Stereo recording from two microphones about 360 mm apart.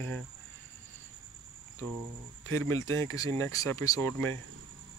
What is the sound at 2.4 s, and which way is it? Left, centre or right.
Speech, centre.